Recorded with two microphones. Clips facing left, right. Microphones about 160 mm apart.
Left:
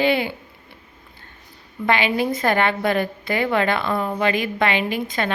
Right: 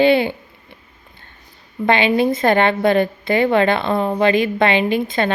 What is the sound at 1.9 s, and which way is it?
A woman's voice, 25° right (ahead or behind).